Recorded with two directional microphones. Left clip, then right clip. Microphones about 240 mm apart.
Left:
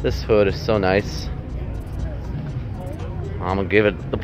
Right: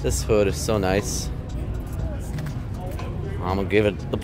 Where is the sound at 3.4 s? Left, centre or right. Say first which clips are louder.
Left 3 dB; centre.